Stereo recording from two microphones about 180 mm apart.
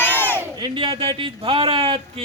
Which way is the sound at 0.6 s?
25° right (ahead or behind).